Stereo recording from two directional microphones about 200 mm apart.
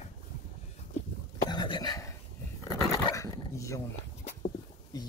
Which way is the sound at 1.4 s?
25° left (ahead or behind).